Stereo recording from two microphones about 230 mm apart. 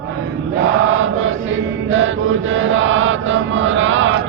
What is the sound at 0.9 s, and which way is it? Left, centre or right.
Chant, right.